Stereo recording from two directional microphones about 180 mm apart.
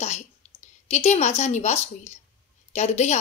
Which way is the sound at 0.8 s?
40° left (ahead or behind).